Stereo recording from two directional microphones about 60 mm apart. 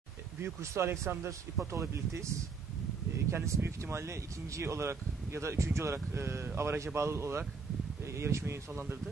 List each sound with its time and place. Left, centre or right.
0.4 s speech: right
3.3 s speech: right